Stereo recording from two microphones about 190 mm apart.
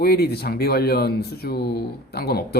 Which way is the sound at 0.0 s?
55° left (ahead or behind).